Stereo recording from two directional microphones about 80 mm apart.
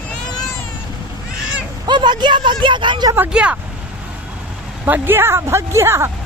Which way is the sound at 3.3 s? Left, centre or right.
Centre.